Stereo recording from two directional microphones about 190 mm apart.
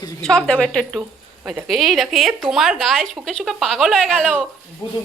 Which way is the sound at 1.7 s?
Centre (ahead or behind).